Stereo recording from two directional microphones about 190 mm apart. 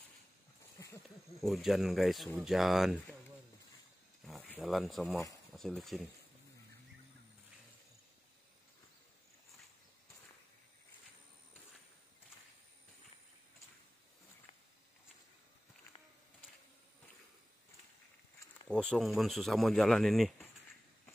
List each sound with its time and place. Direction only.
0.7 s a sound: 15° left (ahead or behind)
1.0 s speech: centre (ahead or behind)
4.3 s speech: 5° left (ahead or behind)
18.7 s speech: 5° left (ahead or behind)